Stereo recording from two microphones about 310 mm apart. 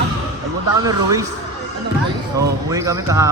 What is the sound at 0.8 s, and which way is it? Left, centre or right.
Speech, centre.